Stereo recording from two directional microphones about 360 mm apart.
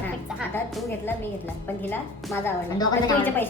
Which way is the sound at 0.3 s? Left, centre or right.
Centre.